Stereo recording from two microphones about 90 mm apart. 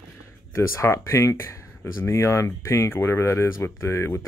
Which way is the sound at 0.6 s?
35° left (ahead or behind).